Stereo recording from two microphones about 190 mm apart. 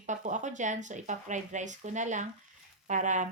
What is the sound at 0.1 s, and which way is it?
Speech, 40° right (ahead or behind).